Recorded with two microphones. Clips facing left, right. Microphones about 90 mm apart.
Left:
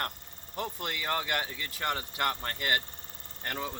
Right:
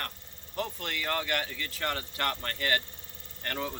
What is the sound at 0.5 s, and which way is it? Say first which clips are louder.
Speech: right 1 dB; 15° left (ahead or behind).